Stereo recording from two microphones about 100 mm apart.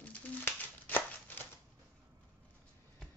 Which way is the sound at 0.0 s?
20° left (ahead or behind).